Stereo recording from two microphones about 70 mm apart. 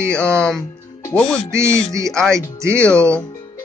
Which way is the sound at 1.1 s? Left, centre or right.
Centre.